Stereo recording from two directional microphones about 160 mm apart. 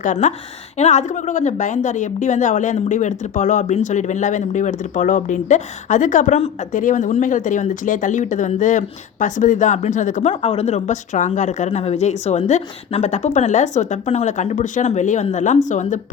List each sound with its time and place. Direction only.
0.0 s a woman's voice: 50° left (ahead or behind)
10.4 s a woman's voice: 40° left (ahead or behind)